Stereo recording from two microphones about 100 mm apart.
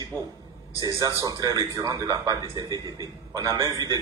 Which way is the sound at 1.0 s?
35° right (ahead or behind).